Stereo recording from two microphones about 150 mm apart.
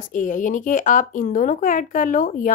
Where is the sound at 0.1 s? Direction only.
60° left (ahead or behind).